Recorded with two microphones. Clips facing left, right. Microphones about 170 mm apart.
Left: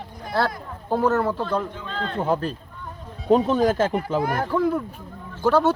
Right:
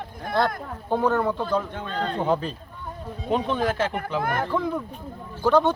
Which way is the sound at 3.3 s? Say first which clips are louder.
Left 6 dB; 40° left (ahead or behind).